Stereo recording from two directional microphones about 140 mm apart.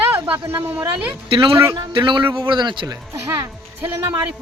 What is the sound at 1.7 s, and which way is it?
A man's voice, 35° right (ahead or behind).